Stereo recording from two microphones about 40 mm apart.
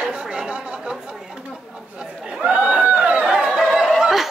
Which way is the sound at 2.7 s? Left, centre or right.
Right.